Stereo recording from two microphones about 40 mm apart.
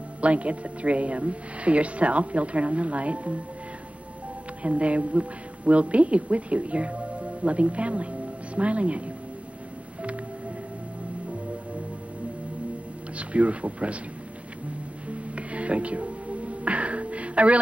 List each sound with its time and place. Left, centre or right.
0.2 s speech: right
4.6 s speech: right
13.2 s speech: right
15.0 s music: right